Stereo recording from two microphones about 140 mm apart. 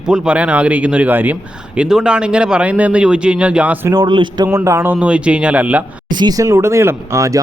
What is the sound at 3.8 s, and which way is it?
Speech, 30° right (ahead or behind).